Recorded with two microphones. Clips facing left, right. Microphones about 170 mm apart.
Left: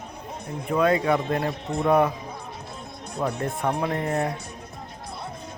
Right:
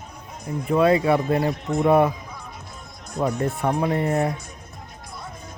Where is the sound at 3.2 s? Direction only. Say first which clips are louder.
Right 3 dB; 5° right (ahead or behind).